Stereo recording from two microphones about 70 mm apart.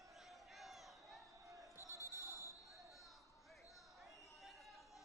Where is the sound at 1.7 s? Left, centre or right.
Left.